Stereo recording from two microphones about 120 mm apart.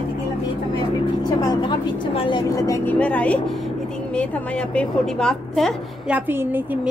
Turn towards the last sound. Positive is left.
turn(degrees=-15)  # may be behind; listen again after turning